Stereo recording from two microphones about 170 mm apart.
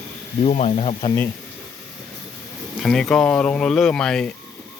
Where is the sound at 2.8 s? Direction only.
5° left (ahead or behind).